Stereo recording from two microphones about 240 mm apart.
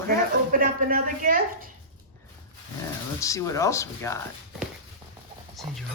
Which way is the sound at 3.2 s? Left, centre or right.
Centre.